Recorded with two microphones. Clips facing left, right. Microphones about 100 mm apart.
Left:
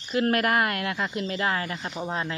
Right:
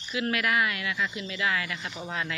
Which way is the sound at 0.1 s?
45° left (ahead or behind).